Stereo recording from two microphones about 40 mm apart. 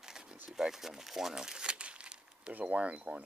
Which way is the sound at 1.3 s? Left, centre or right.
Centre.